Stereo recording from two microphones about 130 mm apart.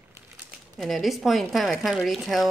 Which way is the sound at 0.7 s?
Centre (ahead or behind).